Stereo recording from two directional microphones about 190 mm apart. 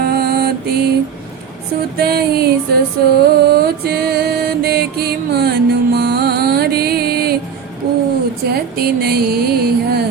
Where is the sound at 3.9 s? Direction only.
55° right (ahead or behind).